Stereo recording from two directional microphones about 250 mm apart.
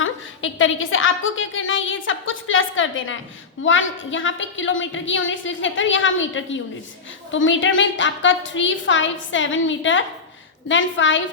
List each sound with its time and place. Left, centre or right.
0.0 s a woman's voice: left